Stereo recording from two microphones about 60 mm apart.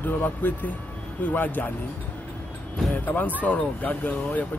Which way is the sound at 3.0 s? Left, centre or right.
Left.